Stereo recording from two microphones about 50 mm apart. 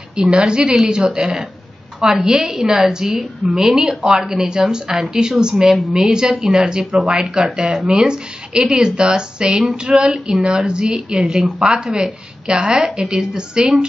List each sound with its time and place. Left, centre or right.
0.1 s a woman's voice: centre